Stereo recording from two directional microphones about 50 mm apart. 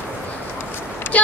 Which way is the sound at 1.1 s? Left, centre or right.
Left.